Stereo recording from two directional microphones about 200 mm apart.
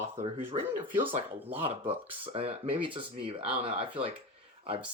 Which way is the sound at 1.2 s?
30° right (ahead or behind).